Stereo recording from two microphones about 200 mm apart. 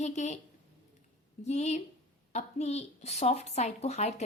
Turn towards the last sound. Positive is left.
turn(degrees=35)  # may be behind; listen again after turning